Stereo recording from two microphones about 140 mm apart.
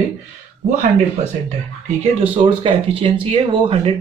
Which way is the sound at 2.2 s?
40° right (ahead or behind).